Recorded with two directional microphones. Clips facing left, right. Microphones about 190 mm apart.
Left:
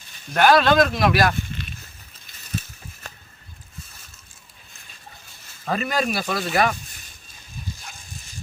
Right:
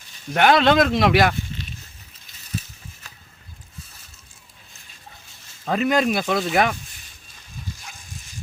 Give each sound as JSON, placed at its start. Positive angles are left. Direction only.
{"t": 0.3, "sound": "speech", "side_deg": -20}
{"t": 5.6, "sound": "speech", "side_deg": -20}